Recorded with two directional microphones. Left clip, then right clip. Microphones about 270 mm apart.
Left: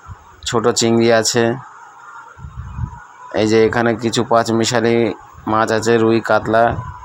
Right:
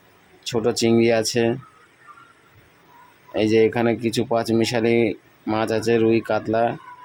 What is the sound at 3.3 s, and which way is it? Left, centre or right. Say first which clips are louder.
Speech: left 4 dB; centre.